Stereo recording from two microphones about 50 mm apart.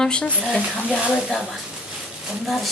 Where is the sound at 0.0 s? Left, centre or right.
Centre.